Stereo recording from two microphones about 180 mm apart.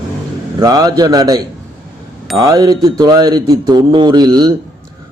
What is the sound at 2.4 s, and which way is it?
Speech, 20° right (ahead or behind).